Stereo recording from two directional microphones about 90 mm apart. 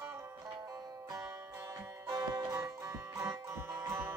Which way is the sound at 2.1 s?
40° right (ahead or behind).